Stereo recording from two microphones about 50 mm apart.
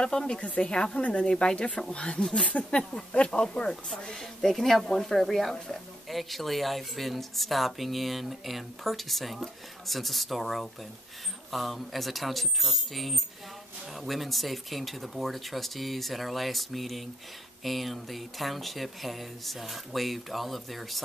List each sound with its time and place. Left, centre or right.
0.0 s speech: centre